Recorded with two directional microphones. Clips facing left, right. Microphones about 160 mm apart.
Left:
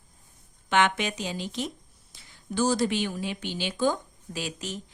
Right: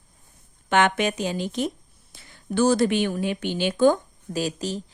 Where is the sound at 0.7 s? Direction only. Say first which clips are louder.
Right 4 dB; 50° right (ahead or behind).